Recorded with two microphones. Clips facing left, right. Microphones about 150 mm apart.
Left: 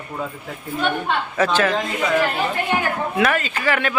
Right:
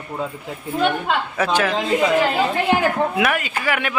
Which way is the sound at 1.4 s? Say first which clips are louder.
Left 2 dB; 10° right (ahead or behind).